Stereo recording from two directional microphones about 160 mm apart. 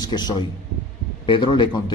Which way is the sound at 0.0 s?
25° left (ahead or behind).